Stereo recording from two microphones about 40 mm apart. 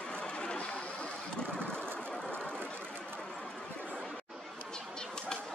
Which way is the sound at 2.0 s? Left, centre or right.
Centre.